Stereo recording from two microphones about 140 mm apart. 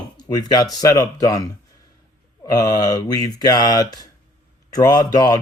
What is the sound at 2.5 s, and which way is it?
Speech, 25° left (ahead or behind).